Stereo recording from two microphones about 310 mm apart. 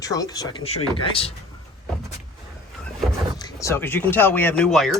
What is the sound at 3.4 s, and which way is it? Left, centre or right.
Speech, centre.